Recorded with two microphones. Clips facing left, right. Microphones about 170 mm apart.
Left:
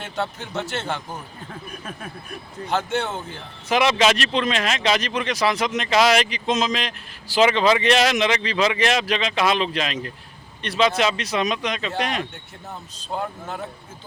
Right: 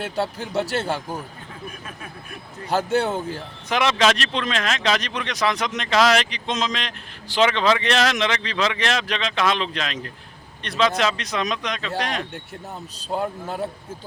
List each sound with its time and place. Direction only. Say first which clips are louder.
0.6 s speech: right 4 dB; 35° right (ahead or behind)
2.7 s speech: right 3 dB; 35° right (ahead or behind)
3.7 s speech: left 1 dB; 5° left (ahead or behind)